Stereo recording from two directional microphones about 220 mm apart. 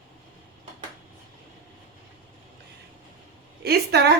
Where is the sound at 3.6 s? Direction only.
45° right (ahead or behind).